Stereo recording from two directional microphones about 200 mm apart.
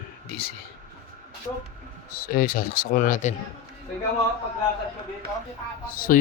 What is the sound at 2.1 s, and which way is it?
Speech, 45° left (ahead or behind).